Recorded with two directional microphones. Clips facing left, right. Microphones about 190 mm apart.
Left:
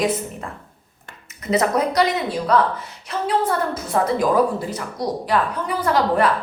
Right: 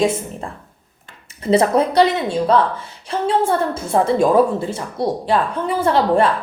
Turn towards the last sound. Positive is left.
turn(degrees=-30)  # may be behind; listen again after turning